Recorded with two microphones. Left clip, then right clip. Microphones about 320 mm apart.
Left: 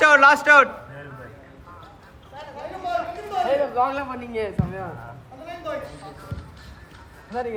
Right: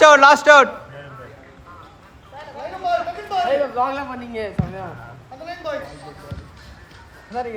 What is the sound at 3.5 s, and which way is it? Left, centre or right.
A man's voice, centre.